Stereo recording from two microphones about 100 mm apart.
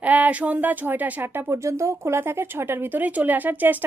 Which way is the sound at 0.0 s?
15° right (ahead or behind).